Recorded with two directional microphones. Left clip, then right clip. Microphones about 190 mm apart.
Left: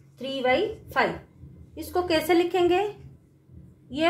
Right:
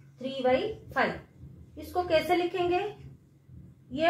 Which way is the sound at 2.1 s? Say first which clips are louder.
Left 3 dB; 45° left (ahead or behind).